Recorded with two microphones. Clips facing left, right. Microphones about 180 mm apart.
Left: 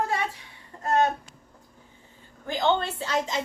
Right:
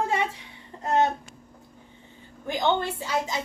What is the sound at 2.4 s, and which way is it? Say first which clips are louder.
Speech: even; 15° right (ahead or behind).